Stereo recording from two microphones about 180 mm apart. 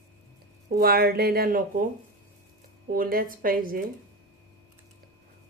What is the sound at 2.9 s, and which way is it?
Speech, 55° right (ahead or behind).